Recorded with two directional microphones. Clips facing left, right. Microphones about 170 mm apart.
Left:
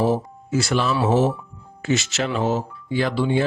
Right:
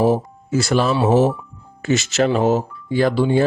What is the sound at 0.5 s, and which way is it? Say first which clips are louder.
Speech: right 4 dB; 40° right (ahead or behind).